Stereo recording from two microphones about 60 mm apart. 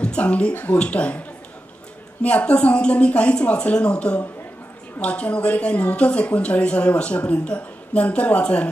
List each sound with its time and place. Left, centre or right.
0.0 s a woman's voice: centre
2.2 s a woman's voice: centre